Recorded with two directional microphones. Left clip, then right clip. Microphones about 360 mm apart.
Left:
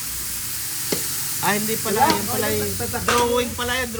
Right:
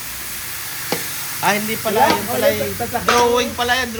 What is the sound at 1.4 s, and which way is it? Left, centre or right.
Speech, centre.